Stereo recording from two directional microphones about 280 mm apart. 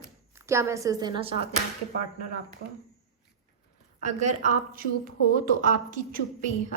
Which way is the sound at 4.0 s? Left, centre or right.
Right.